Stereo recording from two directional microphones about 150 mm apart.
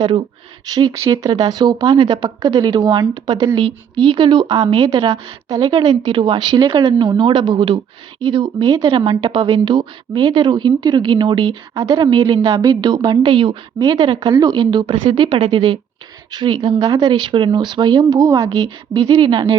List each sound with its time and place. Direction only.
0.7 s speech: 30° right (ahead or behind)
18.4 s speech: 35° right (ahead or behind)